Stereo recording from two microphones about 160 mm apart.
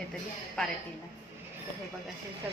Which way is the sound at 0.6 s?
5° left (ahead or behind).